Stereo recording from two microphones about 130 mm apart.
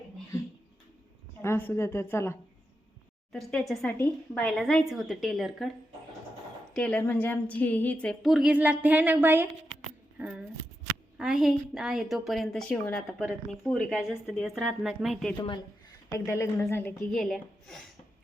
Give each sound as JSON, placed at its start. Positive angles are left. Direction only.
{"t": 1.4, "sound": "a woman's voice", "side_deg": 15}
{"t": 3.3, "sound": "speech", "side_deg": 0}
{"t": 3.9, "sound": "a woman's voice", "side_deg": 15}
{"t": 4.4, "sound": "speech", "side_deg": 5}
{"t": 6.7, "sound": "a woman's voice", "side_deg": 10}
{"t": 8.2, "sound": "speech", "side_deg": -5}
{"t": 10.2, "sound": "a sound", "side_deg": -10}
{"t": 11.2, "sound": "speech", "side_deg": -5}
{"t": 15.4, "sound": "speech", "side_deg": 40}
{"t": 16.0, "sound": "a woman's voice", "side_deg": 25}
{"t": 17.1, "sound": "speech", "side_deg": 0}